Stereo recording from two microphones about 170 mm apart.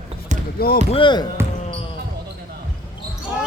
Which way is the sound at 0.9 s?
25° left (ahead or behind).